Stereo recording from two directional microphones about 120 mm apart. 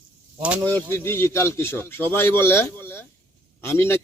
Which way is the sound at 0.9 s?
20° left (ahead or behind).